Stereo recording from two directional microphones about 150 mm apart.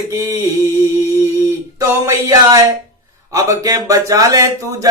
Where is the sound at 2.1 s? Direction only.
20° right (ahead or behind).